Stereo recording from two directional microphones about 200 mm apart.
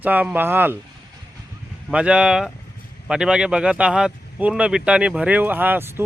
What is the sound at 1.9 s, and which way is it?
Speech, 5° right (ahead or behind).